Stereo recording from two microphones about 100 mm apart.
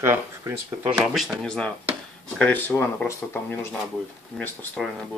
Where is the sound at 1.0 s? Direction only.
Centre (ahead or behind).